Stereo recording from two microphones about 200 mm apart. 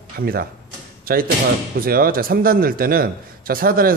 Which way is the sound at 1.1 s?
45° right (ahead or behind).